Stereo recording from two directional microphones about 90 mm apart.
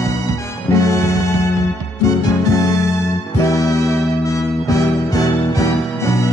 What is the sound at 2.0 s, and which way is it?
Music, 40° left (ahead or behind).